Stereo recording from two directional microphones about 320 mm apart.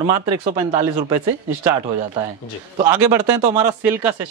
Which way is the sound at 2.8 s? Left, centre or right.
Centre.